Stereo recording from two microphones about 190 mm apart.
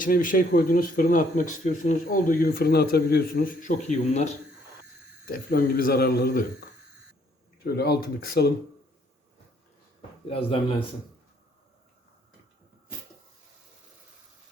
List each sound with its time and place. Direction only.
0.0 s speech: 45° left (ahead or behind)
5.2 s speech: 50° left (ahead or behind)
7.6 s speech: 55° left (ahead or behind)
10.2 s speech: 30° left (ahead or behind)